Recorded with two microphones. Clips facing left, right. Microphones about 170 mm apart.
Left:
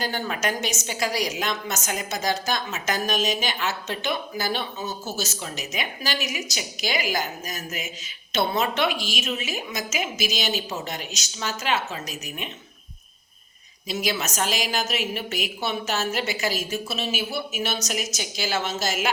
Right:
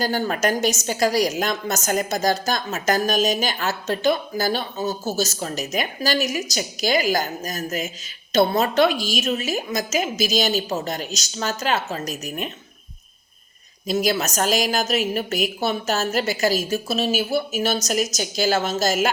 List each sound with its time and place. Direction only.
0.0 s a woman's voice: 40° right (ahead or behind)
13.8 s a woman's voice: 40° right (ahead or behind)